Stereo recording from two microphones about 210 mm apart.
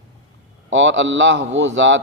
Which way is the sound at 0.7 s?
60° right (ahead or behind).